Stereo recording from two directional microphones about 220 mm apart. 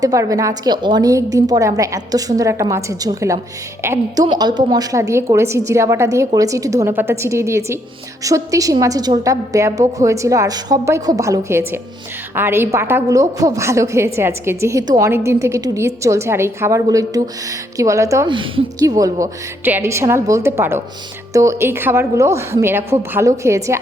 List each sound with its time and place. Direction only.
0.0 s a woman's voice: 15° right (ahead or behind)